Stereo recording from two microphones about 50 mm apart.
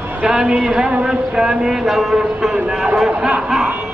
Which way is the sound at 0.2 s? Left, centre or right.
Centre.